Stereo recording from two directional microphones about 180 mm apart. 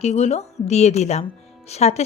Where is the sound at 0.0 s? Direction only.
35° left (ahead or behind).